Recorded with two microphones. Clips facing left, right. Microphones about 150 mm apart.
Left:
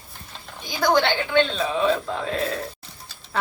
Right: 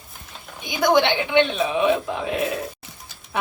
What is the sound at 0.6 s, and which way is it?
Speech, 20° right (ahead or behind).